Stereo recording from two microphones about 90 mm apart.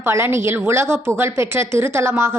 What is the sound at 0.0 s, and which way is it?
A woman's voice, 30° right (ahead or behind).